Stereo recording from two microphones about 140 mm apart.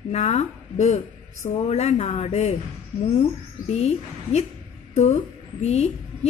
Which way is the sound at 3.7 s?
55° left (ahead or behind).